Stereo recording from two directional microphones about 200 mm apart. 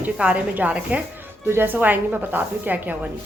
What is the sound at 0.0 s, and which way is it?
A woman's voice, 5° right (ahead or behind).